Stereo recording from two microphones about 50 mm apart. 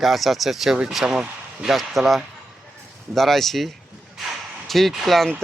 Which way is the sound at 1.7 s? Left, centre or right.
Centre.